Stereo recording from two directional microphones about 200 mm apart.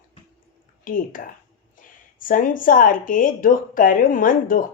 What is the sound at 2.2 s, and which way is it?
Speech, 40° left (ahead or behind).